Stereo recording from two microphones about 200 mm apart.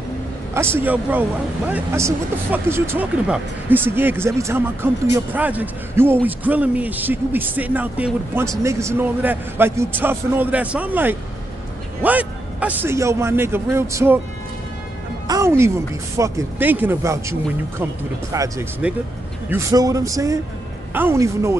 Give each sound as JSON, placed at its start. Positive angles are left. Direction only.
{"t": 0.6, "sound": "speech", "side_deg": -10}
{"t": 15.2, "sound": "speech", "side_deg": -15}